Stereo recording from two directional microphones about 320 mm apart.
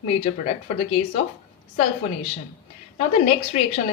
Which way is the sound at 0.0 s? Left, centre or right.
Centre.